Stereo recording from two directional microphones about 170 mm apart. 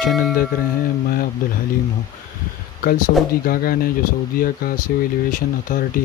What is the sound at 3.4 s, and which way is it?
Speech, 60° left (ahead or behind).